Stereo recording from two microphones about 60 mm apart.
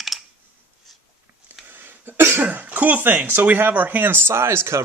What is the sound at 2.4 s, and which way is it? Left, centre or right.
Speech, right.